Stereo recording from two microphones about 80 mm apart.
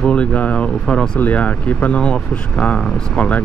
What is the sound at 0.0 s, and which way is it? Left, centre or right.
Speech, centre.